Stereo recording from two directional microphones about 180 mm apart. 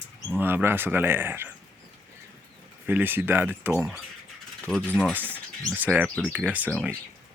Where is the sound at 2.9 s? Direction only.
10° right (ahead or behind).